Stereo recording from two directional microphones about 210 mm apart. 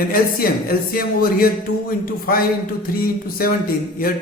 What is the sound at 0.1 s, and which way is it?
A woman's voice, 45° left (ahead or behind).